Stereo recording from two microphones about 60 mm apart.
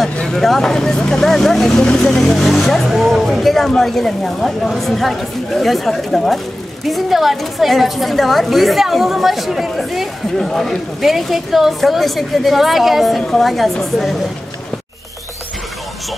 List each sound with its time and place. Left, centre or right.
0.0 s a woman's voice: centre